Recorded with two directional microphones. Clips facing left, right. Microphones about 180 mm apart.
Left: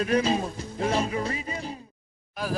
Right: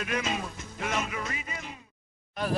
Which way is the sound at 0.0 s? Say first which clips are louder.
Left 8 dB; 35° left (ahead or behind).